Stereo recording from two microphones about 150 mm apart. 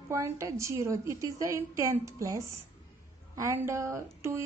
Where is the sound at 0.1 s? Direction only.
20° right (ahead or behind).